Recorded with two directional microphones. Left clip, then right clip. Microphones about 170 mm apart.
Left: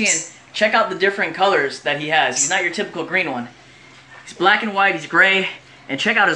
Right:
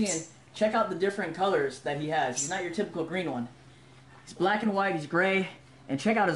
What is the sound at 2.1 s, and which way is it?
Speech, 20° left (ahead or behind).